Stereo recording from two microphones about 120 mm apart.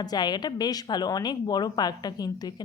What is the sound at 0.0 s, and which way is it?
A woman's voice, 35° left (ahead or behind).